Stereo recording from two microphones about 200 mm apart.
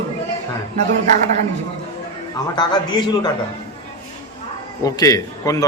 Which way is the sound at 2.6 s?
20° left (ahead or behind).